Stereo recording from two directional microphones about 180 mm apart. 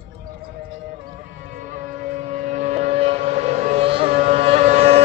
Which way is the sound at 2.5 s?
40° right (ahead or behind).